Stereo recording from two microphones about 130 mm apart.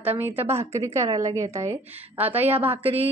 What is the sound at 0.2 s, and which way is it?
A woman's voice, 15° right (ahead or behind).